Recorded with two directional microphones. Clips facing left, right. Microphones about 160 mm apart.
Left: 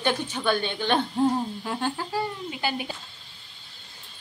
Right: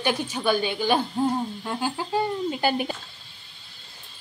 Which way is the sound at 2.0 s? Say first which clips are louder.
Right 3 dB; 20° right (ahead or behind).